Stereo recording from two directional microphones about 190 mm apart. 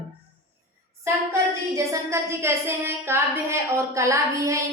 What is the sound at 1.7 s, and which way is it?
A woman's voice, 15° right (ahead or behind).